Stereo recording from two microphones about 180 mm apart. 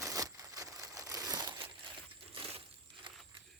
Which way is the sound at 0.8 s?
20° right (ahead or behind).